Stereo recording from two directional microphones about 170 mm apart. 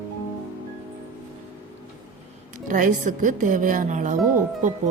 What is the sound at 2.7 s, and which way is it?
A woman's voice, 50° right (ahead or behind).